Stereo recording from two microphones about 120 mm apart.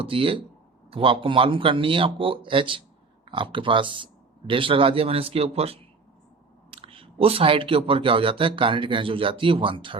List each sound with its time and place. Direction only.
0.0 s speech: 50° right (ahead or behind)